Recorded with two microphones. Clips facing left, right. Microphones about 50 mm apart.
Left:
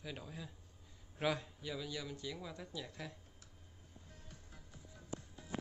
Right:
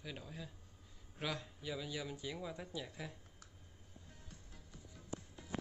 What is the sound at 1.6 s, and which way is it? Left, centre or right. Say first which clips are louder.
Speech: even; centre.